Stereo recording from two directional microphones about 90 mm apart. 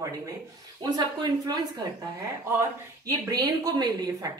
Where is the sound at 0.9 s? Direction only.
50° right (ahead or behind).